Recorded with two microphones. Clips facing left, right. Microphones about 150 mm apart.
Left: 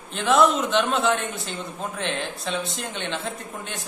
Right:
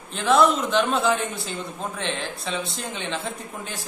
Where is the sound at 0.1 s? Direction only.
Centre (ahead or behind).